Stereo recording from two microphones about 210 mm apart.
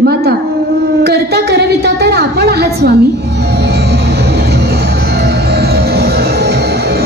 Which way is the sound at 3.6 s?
50° right (ahead or behind).